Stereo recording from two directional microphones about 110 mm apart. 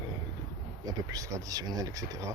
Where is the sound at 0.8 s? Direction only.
30° right (ahead or behind).